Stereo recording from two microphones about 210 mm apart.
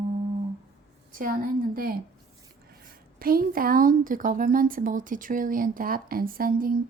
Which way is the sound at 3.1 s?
45° right (ahead or behind).